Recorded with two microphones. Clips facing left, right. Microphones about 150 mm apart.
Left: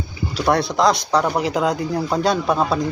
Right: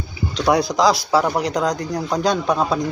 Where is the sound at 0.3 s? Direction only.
Centre (ahead or behind).